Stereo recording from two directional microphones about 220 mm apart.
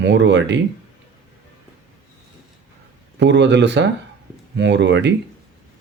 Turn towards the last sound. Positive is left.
turn(degrees=-55)  # may be behind; listen again after turning